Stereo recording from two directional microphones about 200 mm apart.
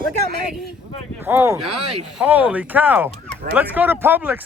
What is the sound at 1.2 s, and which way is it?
Speech, 10° right (ahead or behind).